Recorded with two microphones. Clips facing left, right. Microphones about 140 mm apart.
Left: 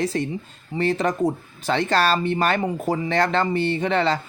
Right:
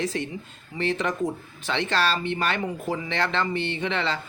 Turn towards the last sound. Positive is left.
turn(degrees=40)  # may be behind; listen again after turning